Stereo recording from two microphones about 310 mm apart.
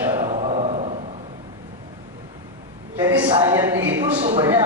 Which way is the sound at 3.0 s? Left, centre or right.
Centre.